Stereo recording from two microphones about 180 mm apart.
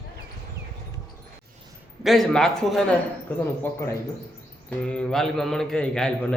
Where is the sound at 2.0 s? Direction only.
Centre (ahead or behind).